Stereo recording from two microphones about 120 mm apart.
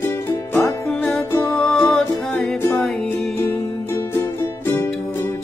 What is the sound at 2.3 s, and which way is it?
Music, 15° left (ahead or behind).